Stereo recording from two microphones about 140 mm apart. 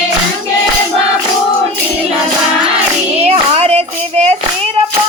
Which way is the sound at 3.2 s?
45° right (ahead or behind).